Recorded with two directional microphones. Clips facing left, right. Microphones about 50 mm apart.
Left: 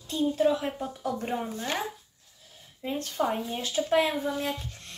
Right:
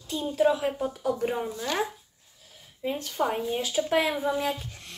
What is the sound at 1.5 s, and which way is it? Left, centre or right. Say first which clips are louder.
Speech: right 1 dB; left.